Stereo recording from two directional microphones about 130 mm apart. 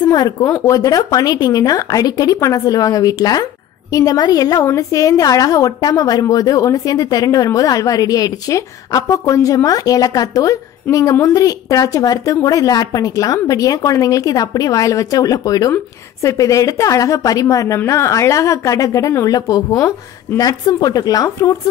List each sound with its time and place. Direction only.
0.0 s a woman's voice: 30° left (ahead or behind)